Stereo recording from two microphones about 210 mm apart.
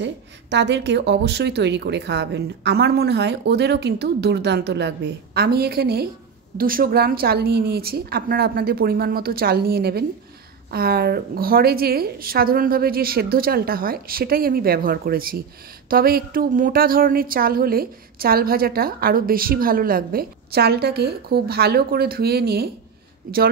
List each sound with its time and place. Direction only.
0.0 s a woman's voice: 55° right (ahead or behind)